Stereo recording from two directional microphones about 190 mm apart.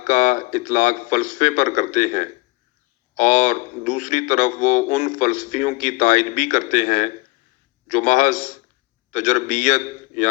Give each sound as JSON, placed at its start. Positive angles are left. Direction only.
{"t": 0.0, "sound": "a man's voice", "side_deg": 40}